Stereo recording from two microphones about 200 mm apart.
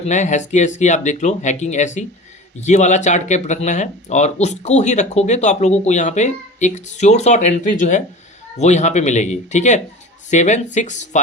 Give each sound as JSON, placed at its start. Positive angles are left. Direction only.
{"t": 0.0, "sound": "speech", "side_deg": 35}